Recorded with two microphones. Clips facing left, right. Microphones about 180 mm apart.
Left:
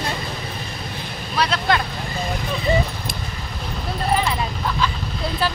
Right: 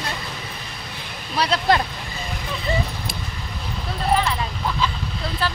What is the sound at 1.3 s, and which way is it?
Speech, 35° right (ahead or behind).